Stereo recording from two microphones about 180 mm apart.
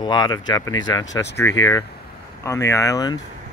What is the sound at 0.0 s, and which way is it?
Speech, 25° left (ahead or behind).